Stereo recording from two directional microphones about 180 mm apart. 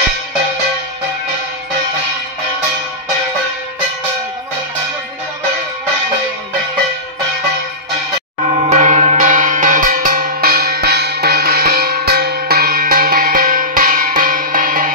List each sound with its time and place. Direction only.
8.5 s church bell: 35° right (ahead or behind)